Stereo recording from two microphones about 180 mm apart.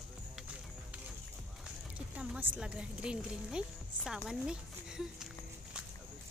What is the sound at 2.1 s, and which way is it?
Speech, 5° right (ahead or behind).